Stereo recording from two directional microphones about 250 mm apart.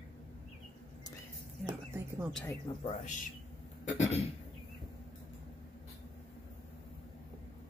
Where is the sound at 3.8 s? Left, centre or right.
Left.